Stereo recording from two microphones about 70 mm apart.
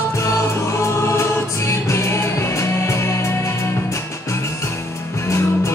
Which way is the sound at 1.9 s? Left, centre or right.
Left.